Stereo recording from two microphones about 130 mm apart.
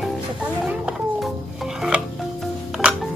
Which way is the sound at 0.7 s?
5° right (ahead or behind).